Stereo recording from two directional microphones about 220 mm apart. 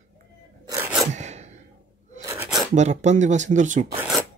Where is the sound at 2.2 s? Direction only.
15° right (ahead or behind).